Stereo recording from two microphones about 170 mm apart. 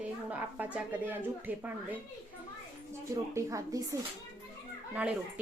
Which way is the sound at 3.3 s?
20° right (ahead or behind).